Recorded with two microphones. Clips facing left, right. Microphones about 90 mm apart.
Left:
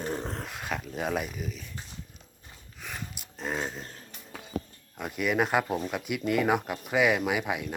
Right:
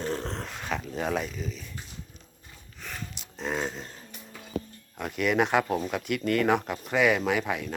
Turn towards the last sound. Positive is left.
turn(degrees=10)  # may be behind; listen again after turning